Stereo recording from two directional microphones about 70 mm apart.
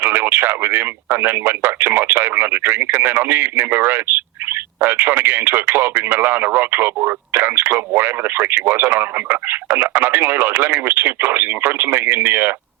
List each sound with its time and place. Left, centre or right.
0.0 s speech: right